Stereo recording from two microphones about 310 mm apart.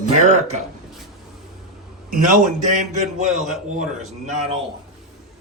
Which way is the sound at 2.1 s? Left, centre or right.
Right.